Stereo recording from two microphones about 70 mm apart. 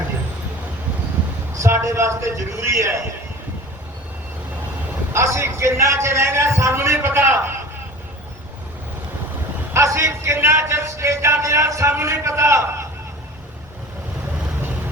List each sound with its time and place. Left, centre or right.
1.6 s speech: right
5.1 s a man's voice: right
9.7 s speech: right